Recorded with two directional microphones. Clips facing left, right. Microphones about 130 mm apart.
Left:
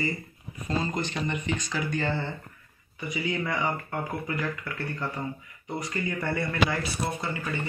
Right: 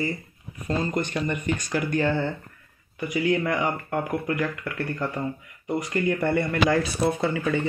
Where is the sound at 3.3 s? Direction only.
15° right (ahead or behind).